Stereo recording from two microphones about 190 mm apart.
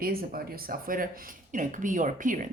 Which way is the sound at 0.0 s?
50° right (ahead or behind).